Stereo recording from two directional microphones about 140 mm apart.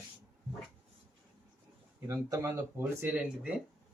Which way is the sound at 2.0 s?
20° right (ahead or behind).